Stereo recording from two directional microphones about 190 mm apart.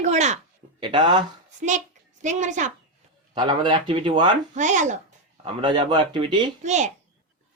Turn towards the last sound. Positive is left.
turn(degrees=-40)  # may be behind; listen again after turning